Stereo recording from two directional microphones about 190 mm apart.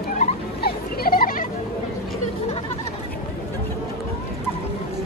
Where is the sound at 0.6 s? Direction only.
50° left (ahead or behind).